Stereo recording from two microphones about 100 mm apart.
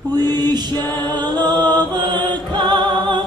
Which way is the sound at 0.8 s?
45° right (ahead or behind).